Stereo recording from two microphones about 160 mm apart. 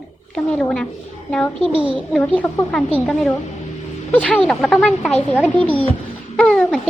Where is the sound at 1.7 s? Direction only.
30° right (ahead or behind).